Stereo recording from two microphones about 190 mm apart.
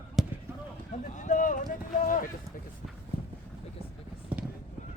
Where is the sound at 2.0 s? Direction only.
45° left (ahead or behind).